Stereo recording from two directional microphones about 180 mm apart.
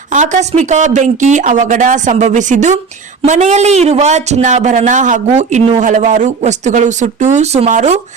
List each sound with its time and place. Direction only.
0.1 s speech: 45° right (ahead or behind)